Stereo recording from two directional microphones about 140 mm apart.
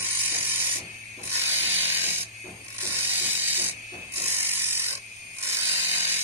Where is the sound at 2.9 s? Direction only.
15° right (ahead or behind).